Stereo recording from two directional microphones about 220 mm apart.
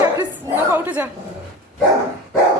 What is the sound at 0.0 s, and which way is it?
Chuckle, 10° right (ahead or behind).